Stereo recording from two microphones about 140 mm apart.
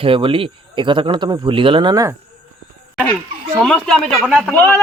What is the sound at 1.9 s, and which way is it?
Speech, 25° right (ahead or behind).